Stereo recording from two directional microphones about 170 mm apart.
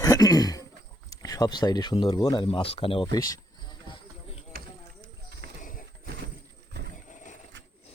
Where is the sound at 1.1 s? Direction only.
20° left (ahead or behind).